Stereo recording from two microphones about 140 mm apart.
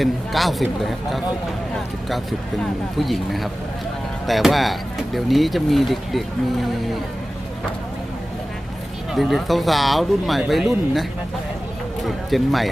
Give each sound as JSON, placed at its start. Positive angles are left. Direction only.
{"t": 0.0, "sound": "speech", "side_deg": 0}
{"t": 9.1, "sound": "speech", "side_deg": 0}
{"t": 12.0, "sound": "speech", "side_deg": 0}